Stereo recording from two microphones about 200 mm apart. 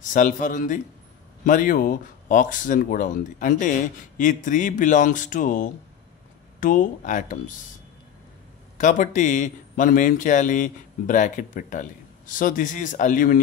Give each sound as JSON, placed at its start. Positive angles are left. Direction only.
{"t": 0.0, "sound": "speech", "side_deg": 40}
{"t": 8.7, "sound": "speech", "side_deg": 40}